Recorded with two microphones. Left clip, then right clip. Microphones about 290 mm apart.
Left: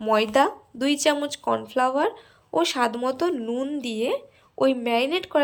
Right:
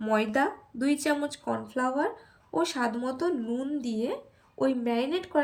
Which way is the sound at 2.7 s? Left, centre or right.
Centre.